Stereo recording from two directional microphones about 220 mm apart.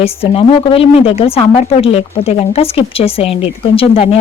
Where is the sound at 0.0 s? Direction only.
25° left (ahead or behind).